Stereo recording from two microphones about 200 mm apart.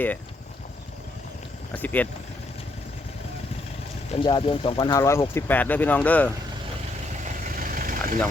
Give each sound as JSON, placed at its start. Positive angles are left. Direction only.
{"t": 1.7, "sound": "speech", "side_deg": 10}
{"t": 4.1, "sound": "speech", "side_deg": 25}
{"t": 7.7, "sound": "vehicle", "side_deg": -45}